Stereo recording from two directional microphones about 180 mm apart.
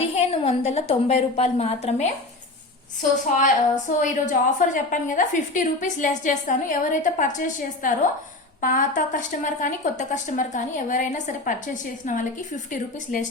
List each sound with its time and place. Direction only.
0.0 s a woman's voice: 35° left (ahead or behind)
3.3 s a woman's voice: 45° left (ahead or behind)